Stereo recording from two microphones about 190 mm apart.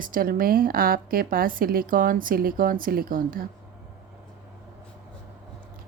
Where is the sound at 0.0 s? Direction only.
45° right (ahead or behind).